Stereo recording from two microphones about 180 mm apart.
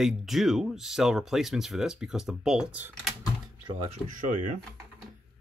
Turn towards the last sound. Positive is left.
turn(degrees=-45)  # may be behind; listen again after turning